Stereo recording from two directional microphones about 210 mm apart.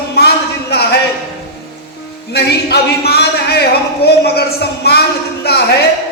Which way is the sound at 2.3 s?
50° left (ahead or behind).